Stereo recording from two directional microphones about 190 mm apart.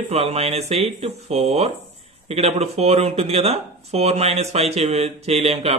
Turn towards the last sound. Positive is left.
turn(degrees=-35)  # may be behind; listen again after turning